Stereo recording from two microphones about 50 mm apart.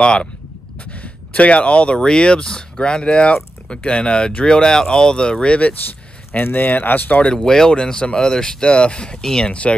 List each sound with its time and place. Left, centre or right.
0.0 s speech: centre
6.3 s speech: left
7.2 s speech: centre